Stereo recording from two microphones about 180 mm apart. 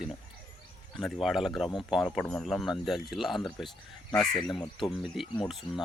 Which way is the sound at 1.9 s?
Centre (ahead or behind).